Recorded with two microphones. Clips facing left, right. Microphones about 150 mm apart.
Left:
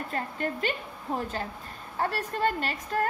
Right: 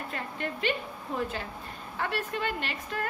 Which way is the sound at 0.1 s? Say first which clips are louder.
Left 5 dB; 40° left (ahead or behind).